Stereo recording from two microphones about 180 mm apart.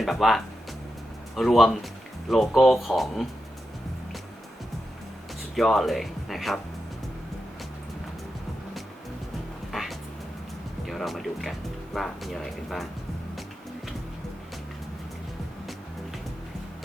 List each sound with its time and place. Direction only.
0.0 s speech: centre (ahead or behind)
5.5 s speech: centre (ahead or behind)
10.8 s speech: centre (ahead or behind)